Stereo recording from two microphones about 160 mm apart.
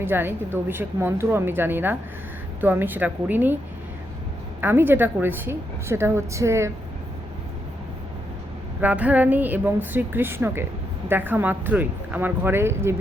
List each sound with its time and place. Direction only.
0.0 s a woman's voice: 15° right (ahead or behind)
4.6 s a woman's voice: 10° right (ahead or behind)
8.8 s a woman's voice: 10° right (ahead or behind)